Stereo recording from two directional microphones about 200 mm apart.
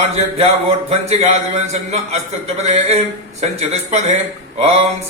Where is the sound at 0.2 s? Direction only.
30° right (ahead or behind).